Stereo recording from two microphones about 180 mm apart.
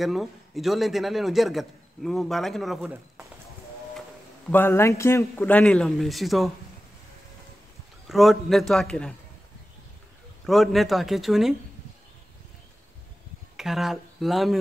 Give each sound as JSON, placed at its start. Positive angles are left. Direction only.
{"t": 0.0, "sound": "a man's voice", "side_deg": 0}
{"t": 4.5, "sound": "a man's voice", "side_deg": 10}
{"t": 8.1, "sound": "a man's voice", "side_deg": 0}
{"t": 10.4, "sound": "a man's voice", "side_deg": 0}
{"t": 13.6, "sound": "speech", "side_deg": 0}